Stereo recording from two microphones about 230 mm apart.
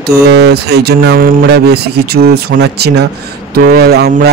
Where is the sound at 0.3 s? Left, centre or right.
Right.